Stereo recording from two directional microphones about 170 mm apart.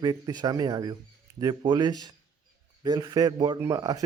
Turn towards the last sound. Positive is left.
turn(degrees=-20)  # may be behind; listen again after turning